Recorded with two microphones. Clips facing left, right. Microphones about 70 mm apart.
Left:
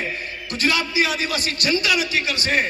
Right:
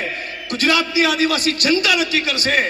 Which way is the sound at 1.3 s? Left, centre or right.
Left.